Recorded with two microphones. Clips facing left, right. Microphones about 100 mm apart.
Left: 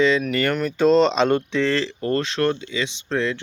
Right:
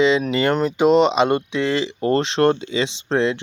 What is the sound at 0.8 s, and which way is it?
Speech, 15° right (ahead or behind).